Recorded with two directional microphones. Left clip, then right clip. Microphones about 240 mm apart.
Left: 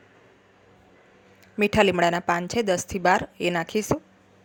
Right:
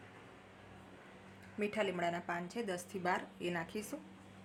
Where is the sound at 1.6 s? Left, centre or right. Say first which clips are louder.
Left 17 dB; left.